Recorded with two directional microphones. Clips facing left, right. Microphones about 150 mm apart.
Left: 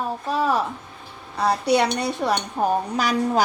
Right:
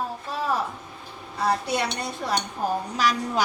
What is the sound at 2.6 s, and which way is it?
Speech, 65° left (ahead or behind).